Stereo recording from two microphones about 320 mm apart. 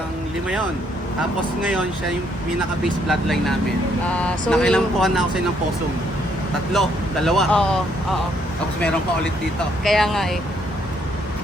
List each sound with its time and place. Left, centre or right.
3.1 s speech: centre
7.3 s speech: centre
9.8 s speech: centre